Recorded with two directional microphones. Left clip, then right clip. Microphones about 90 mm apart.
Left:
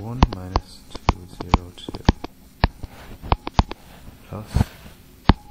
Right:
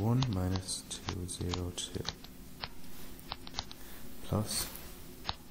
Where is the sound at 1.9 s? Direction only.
5° left (ahead or behind).